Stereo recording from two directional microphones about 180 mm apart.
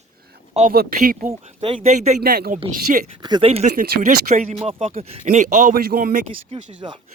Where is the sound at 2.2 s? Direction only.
55° right (ahead or behind).